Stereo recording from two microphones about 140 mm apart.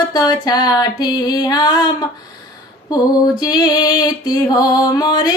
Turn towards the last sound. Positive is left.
turn(degrees=30)  # may be behind; listen again after turning